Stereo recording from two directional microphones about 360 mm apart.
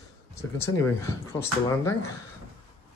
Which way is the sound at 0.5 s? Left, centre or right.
Centre.